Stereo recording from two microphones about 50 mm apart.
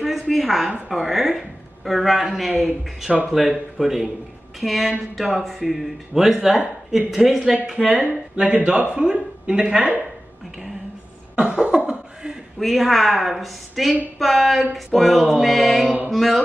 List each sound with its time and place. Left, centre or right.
0.0 s a woman's voice: centre
1.9 s music: centre
3.3 s speech: centre
4.6 s music: centre
6.9 s speech: centre
11.3 s cough: centre
12.5 s music: centre